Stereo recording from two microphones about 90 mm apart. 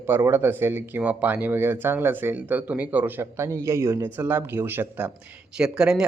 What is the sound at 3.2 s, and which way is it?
Speech, 30° right (ahead or behind).